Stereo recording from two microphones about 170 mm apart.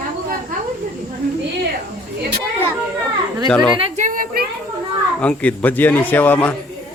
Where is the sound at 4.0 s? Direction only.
55° right (ahead or behind).